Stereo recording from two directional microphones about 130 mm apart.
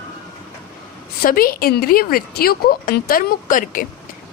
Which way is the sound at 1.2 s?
90° left.